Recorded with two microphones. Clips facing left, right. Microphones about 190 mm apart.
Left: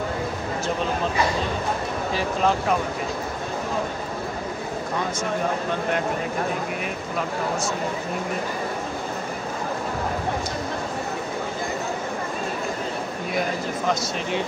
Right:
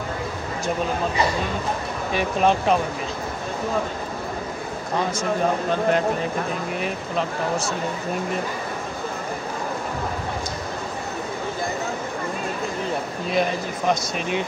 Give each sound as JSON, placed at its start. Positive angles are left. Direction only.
{"t": 2.1, "sound": "speech", "side_deg": -20}